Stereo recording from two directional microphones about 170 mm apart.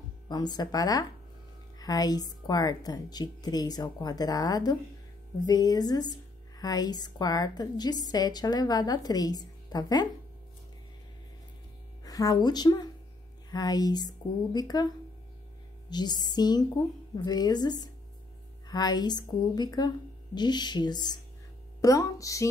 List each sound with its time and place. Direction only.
0.3 s a woman's voice: 25° left (ahead or behind)
12.0 s a woman's voice: 20° left (ahead or behind)
15.9 s a woman's voice: 25° left (ahead or behind)